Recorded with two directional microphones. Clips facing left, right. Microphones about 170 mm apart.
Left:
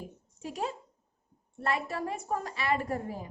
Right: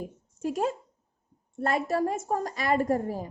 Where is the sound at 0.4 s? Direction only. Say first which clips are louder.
Right 7 dB; 45° right (ahead or behind).